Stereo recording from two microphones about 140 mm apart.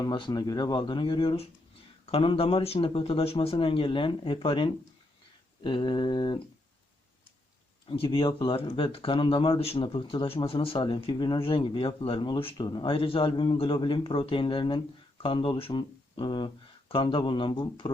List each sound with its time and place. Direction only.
0.0 s speech: 30° left (ahead or behind)
7.9 s speech: 40° left (ahead or behind)